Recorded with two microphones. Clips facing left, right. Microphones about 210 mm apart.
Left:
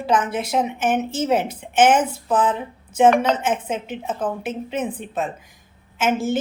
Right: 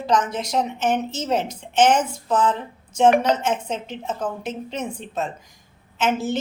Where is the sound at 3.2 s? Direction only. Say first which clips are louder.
Even; 55° left (ahead or behind).